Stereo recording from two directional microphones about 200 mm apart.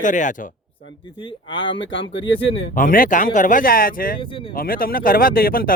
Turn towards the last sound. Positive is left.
turn(degrees=45)  # may be behind; listen again after turning